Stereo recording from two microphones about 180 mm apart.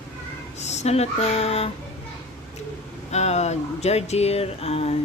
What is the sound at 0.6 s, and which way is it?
Speech, 40° left (ahead or behind).